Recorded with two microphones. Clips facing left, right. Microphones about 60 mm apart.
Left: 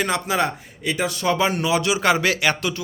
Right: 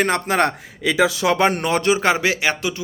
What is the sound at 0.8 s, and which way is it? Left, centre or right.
Speech, right.